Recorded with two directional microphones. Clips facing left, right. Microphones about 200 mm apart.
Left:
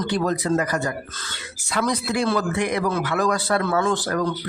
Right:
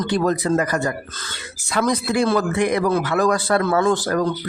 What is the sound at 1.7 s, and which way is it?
A man's voice, 50° right (ahead or behind).